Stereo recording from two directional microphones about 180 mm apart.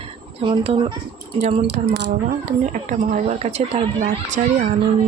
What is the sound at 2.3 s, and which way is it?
Speech, 45° right (ahead or behind).